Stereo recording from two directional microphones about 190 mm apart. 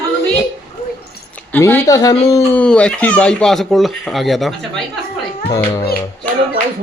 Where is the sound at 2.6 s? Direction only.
5° left (ahead or behind).